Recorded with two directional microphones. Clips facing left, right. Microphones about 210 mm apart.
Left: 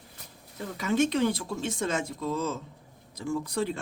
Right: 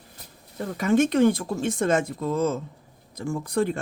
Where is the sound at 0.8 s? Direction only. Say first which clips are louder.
Right 6 dB; 50° right (ahead or behind).